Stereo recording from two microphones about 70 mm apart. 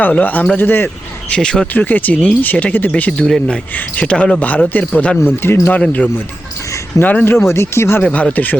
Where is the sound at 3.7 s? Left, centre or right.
Left.